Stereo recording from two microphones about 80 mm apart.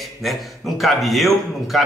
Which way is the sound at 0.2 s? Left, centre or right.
Centre.